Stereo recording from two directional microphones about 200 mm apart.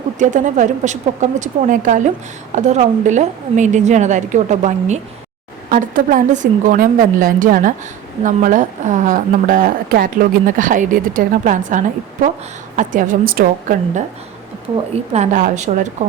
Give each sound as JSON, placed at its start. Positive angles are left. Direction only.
{"t": 0.2, "sound": "a woman's voice", "side_deg": -40}
{"t": 15.1, "sound": "a woman's voice", "side_deg": -35}